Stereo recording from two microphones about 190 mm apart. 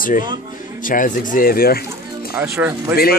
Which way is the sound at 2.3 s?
10° right (ahead or behind).